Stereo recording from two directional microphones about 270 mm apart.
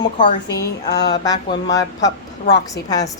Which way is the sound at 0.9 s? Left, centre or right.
Left.